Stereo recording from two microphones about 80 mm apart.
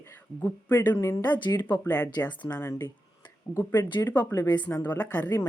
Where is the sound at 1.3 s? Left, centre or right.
Left.